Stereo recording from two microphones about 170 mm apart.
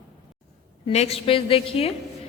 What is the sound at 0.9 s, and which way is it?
A woman's voice, 40° left (ahead or behind).